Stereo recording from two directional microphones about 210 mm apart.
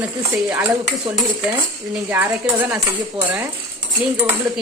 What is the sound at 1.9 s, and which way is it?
Cutlery, 10° right (ahead or behind).